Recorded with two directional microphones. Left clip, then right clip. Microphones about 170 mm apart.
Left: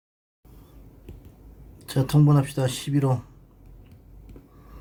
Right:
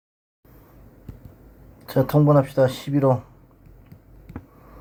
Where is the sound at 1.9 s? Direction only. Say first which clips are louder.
Right 6 dB; 15° left (ahead or behind).